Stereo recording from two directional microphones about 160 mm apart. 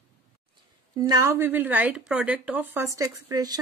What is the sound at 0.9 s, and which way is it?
A woman's voice, 20° right (ahead or behind).